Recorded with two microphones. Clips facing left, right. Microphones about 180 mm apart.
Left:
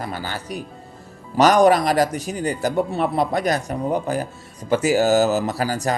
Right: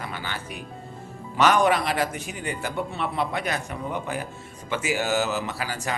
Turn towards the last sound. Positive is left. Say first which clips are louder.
# left 8 dB
turn(degrees=40)  # may be behind; listen again after turning